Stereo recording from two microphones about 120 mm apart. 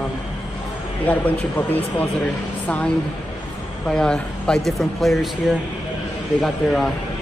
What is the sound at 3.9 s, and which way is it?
Speech, 5° left (ahead or behind).